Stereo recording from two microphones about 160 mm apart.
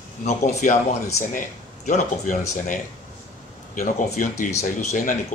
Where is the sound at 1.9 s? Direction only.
50° left (ahead or behind).